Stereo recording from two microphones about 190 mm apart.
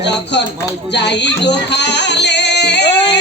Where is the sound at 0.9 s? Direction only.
65° left (ahead or behind).